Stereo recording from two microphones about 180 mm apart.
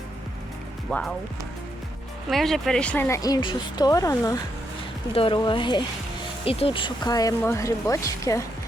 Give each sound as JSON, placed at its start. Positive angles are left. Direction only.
{"t": 0.9, "sound": "speech", "side_deg": 5}
{"t": 2.3, "sound": "speech", "side_deg": 0}
{"t": 5.1, "sound": "speech", "side_deg": 30}